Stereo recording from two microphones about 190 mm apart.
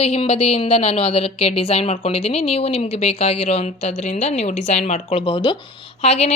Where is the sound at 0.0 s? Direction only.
30° left (ahead or behind).